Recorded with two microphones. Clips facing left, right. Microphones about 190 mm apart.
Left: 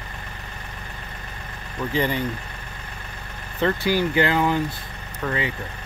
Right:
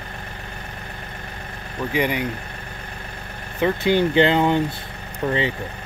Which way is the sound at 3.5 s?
15° right (ahead or behind).